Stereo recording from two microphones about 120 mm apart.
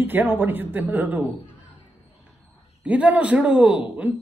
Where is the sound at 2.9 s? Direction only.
10° right (ahead or behind).